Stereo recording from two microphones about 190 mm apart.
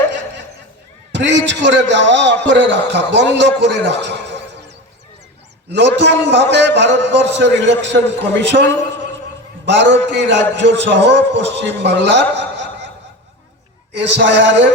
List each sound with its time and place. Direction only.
1.1 s a man's voice: 70° right (ahead or behind)
6.0 s a man's voice: 65° right (ahead or behind)
9.6 s a man's voice: 70° right (ahead or behind)
13.9 s a man's voice: 70° right (ahead or behind)